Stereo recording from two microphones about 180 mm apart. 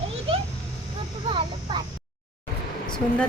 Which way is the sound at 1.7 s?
25° right (ahead or behind).